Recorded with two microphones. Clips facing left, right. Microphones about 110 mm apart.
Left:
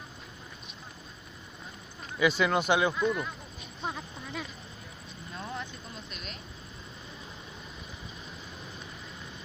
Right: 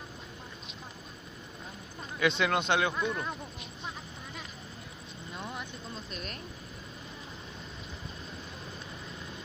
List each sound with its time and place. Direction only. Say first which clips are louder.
2.1 s speech: left 2 dB; 5° left (ahead or behind)
5.3 s vehicle: left 2 dB; 15° right (ahead or behind)